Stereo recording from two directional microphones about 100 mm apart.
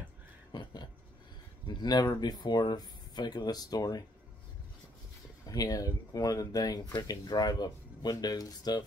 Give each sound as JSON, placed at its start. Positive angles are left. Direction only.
{"t": 0.5, "sound": "a sound", "side_deg": 45}
{"t": 1.7, "sound": "speech", "side_deg": 45}
{"t": 5.5, "sound": "speech", "side_deg": 35}